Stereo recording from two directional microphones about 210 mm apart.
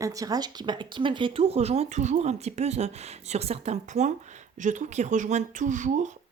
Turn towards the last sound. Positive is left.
turn(degrees=-35)  # may be behind; listen again after turning